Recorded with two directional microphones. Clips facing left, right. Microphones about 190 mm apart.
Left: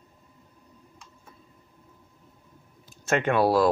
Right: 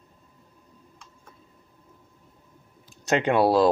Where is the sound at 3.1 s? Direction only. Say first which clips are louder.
Right 2 dB; 20° right (ahead or behind).